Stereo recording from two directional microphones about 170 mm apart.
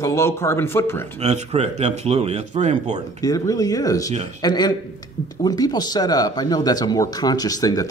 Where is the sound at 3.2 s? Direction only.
20° left (ahead or behind).